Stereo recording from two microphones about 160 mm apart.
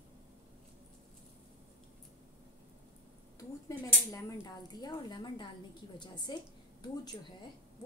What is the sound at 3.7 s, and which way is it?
Speech, 20° left (ahead or behind).